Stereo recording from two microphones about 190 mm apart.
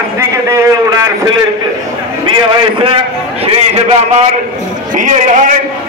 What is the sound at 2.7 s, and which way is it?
A man's voice, 30° right (ahead or behind).